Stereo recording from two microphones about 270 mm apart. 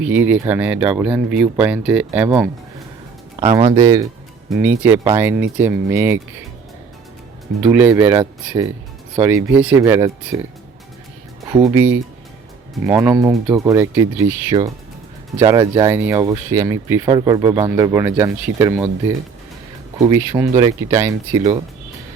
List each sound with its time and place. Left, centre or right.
0.0 s speech: centre
3.4 s speech: centre
7.6 s speech: centre
11.5 s speech: centre
20.0 s speech: centre